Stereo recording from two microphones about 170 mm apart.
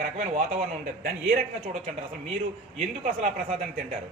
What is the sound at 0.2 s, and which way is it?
A man's voice, 45° right (ahead or behind).